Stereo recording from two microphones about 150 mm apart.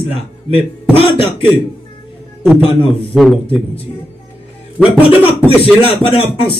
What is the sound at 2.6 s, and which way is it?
Speech, 35° left (ahead or behind).